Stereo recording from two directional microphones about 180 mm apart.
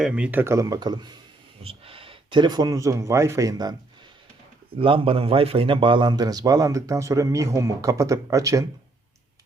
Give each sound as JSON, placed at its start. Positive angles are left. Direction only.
{"t": 0.0, "sound": "speech", "side_deg": -5}
{"t": 4.8, "sound": "a man's voice", "side_deg": -30}